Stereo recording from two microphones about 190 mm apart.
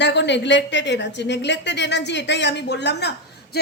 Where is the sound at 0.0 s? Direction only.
65° left (ahead or behind).